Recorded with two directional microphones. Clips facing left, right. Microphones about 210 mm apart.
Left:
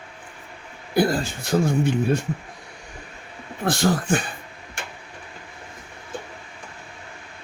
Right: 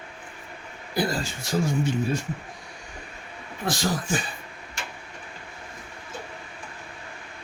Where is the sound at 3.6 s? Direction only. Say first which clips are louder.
Left 6 dB; 60° left (ahead or behind).